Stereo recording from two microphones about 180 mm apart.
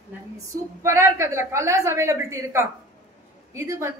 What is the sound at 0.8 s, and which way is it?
A woman's voice, 15° right (ahead or behind).